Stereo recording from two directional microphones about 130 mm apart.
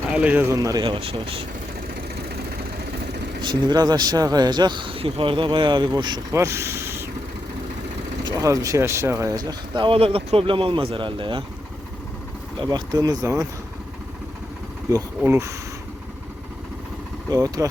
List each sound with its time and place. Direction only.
0.1 s speech: 10° right (ahead or behind); by 1.5 s 45° right (ahead or behind)
3.4 s speech: 30° right (ahead or behind)
6.4 s a sound: 20° right (ahead or behind)
8.2 s speech: 25° right (ahead or behind)
12.5 s speech: 30° right (ahead or behind)
15.2 s speech: 20° right (ahead or behind)
17.2 s speech: 30° right (ahead or behind)